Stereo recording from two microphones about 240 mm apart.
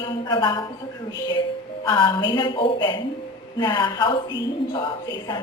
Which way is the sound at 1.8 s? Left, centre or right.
Centre.